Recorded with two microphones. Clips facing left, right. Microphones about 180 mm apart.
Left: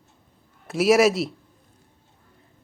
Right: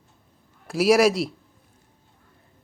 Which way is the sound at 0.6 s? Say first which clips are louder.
Even; centre (ahead or behind).